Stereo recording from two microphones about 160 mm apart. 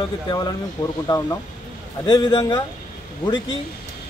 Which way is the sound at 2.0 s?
30° left (ahead or behind).